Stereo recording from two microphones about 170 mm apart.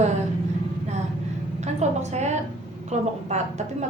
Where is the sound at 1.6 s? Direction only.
40° right (ahead or behind).